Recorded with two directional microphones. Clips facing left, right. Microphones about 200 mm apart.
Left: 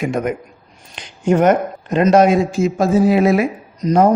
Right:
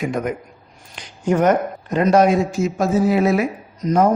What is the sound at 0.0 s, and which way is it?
A man's voice, 25° left (ahead or behind).